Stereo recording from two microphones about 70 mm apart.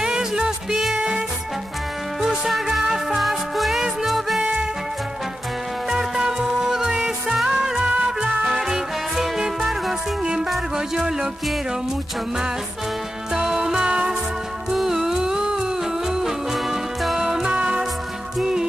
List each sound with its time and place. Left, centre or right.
0.0 s music: centre
2.2 s music: centre
4.4 s music: centre
5.9 s music: centre
13.3 s music: centre